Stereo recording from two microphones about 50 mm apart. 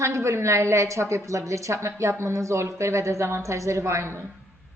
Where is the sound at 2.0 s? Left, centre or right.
Right.